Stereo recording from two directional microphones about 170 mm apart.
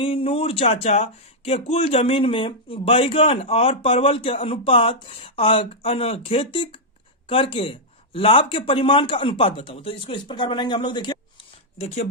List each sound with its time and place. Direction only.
0.0 s speech: 35° left (ahead or behind)